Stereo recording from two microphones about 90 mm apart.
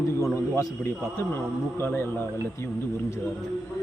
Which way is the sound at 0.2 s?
30° left (ahead or behind).